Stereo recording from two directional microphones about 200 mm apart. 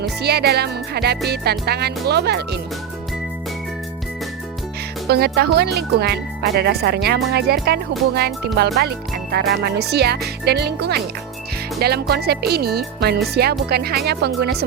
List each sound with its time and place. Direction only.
0.2 s speech: 55° right (ahead or behind)
5.0 s speech: 55° right (ahead or behind)